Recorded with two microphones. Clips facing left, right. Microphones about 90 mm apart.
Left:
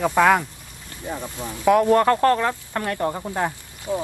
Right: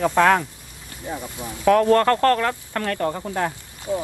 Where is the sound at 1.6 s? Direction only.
15° left (ahead or behind).